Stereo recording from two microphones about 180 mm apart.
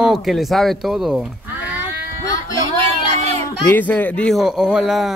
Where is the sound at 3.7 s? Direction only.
10° left (ahead or behind).